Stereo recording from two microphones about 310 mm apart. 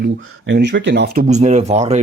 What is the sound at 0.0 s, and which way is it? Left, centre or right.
Speech, right.